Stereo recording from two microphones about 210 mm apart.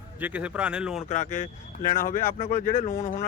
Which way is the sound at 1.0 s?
35° left (ahead or behind).